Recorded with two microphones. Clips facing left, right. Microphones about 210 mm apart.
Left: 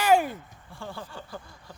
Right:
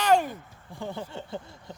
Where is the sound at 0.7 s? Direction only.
20° right (ahead or behind).